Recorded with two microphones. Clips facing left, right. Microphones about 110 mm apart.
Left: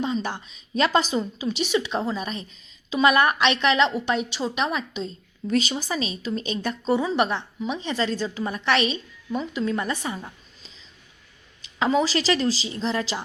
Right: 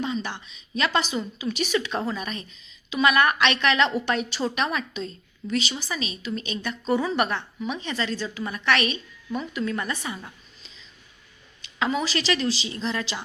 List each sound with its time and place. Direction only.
0.0 s a woman's voice: 35° left (ahead or behind)
5.5 s a woman's voice: 40° left (ahead or behind)
6.9 s a woman's voice: 20° left (ahead or behind)
11.8 s a woman's voice: 30° left (ahead or behind)